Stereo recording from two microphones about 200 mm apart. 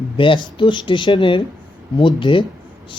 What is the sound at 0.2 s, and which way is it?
Speech, 25° left (ahead or behind).